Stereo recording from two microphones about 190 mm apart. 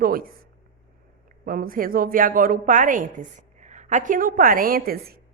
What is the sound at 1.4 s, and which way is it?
A woman's voice, 50° right (ahead or behind).